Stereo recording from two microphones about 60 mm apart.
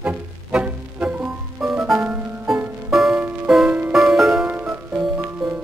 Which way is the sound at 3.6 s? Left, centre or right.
Right.